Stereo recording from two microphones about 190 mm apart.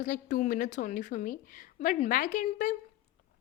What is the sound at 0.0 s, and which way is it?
A woman's voice, 40° left (ahead or behind).